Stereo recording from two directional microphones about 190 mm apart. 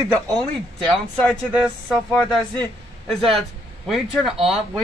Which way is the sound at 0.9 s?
5° left (ahead or behind).